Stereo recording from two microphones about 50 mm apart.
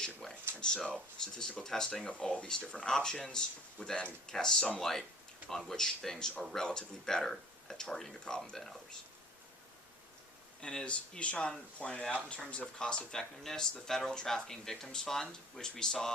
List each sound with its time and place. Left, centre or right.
0.2 s speech: centre
2.0 s speech: left; by 9.0 s centre
10.6 s speech: centre
13.1 s speech: centre